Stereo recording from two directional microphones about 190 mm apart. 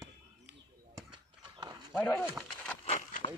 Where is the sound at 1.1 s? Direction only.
25° right (ahead or behind).